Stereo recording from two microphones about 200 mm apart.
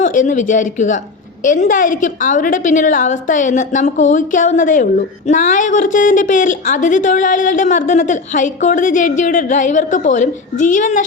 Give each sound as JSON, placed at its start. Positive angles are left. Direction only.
{"t": 0.0, "sound": "a woman's voice", "side_deg": 40}